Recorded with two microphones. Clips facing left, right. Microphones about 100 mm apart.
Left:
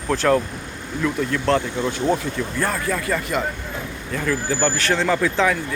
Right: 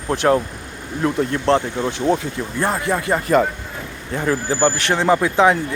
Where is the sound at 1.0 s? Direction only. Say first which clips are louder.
Right 3 dB; 30° right (ahead or behind).